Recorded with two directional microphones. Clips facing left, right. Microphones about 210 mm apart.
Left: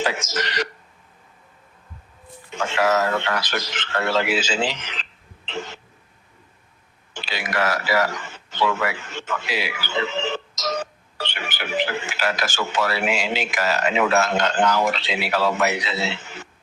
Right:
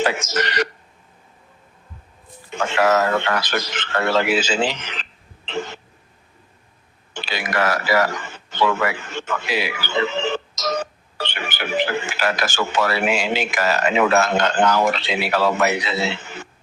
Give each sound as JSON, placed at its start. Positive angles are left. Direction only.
{"t": 0.0, "sound": "speech", "side_deg": -60}
{"t": 2.5, "sound": "a man's voice", "side_deg": -60}
{"t": 5.5, "sound": "cough", "side_deg": -55}
{"t": 7.1, "sound": "a man's voice", "side_deg": -55}